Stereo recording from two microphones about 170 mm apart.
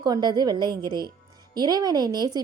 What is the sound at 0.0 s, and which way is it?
A woman's voice, 25° right (ahead or behind).